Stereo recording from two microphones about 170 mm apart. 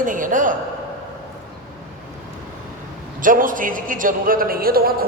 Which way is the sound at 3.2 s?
55° right (ahead or behind).